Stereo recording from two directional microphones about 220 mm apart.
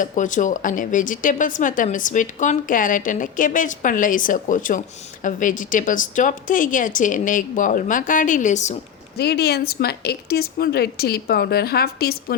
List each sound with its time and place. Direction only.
0.0 s speech: 35° left (ahead or behind)
9.1 s speech: 45° left (ahead or behind)